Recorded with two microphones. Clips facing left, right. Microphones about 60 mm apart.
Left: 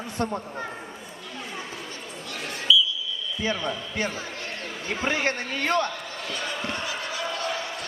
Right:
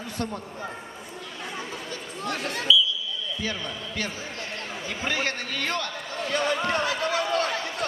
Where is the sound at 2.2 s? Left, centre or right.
Right.